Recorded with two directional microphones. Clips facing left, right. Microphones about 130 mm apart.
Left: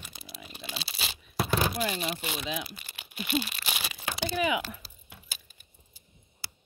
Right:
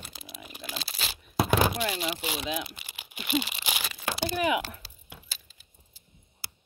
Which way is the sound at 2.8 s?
10° right (ahead or behind).